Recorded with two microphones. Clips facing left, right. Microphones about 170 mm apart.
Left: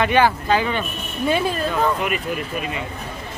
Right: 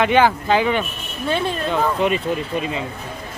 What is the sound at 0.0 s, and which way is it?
Speech, 15° right (ahead or behind).